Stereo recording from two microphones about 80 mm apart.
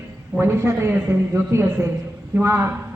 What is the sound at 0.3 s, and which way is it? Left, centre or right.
A woman's voice, right.